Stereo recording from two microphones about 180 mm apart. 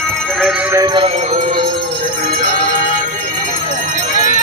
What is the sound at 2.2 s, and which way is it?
Music, 50° right (ahead or behind).